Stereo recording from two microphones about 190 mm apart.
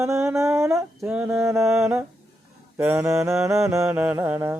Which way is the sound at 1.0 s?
10° right (ahead or behind).